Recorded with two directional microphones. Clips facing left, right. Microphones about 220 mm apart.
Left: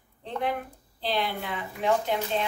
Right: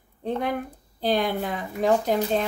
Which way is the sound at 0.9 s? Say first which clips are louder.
Right 6 dB; 45° right (ahead or behind).